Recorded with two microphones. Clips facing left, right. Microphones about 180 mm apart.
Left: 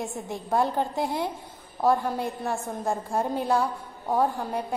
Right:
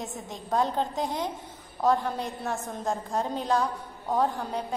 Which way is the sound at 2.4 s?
15° left (ahead or behind).